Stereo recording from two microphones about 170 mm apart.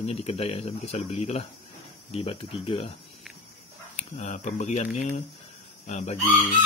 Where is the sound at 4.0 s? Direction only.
45° left (ahead or behind).